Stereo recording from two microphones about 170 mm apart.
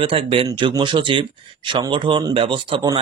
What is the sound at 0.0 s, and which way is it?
Speech, 30° right (ahead or behind).